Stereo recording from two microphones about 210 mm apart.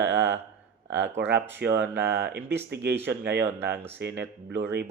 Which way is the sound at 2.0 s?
55° right (ahead or behind).